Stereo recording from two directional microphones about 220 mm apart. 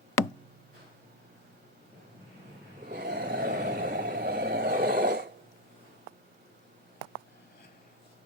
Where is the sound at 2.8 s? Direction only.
45° right (ahead or behind).